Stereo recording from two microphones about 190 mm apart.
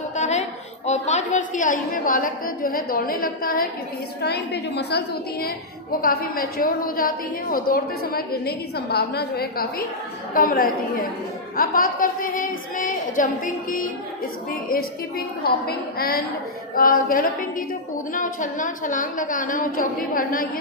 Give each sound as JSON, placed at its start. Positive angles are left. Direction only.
{"t": 0.2, "sound": "a sound", "side_deg": 40}
{"t": 0.9, "sound": "a woman's voice", "side_deg": 35}
{"t": 4.2, "sound": "a woman's voice", "side_deg": 60}
{"t": 15.4, "sound": "a woman's voice", "side_deg": 55}